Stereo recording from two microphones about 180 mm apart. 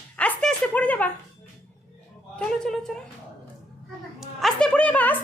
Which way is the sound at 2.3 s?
5° left (ahead or behind).